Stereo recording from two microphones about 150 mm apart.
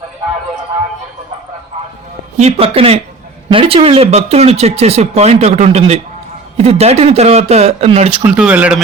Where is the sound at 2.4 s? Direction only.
40° right (ahead or behind).